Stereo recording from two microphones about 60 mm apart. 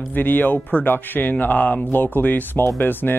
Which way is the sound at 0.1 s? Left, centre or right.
Left.